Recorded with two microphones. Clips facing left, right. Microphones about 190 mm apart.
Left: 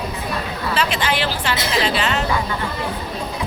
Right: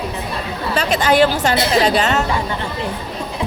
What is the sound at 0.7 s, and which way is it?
A woman's voice, 40° right (ahead or behind).